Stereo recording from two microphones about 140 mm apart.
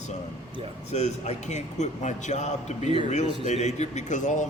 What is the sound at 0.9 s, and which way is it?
A man's voice, 50° left (ahead or behind).